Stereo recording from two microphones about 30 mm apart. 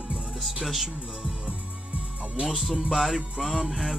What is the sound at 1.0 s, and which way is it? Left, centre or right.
Speech, centre.